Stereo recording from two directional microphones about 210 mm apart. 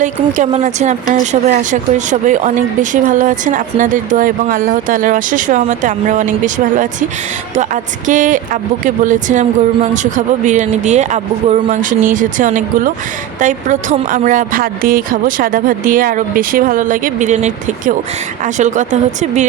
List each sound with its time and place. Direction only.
0.0 s speech: 35° right (ahead or behind)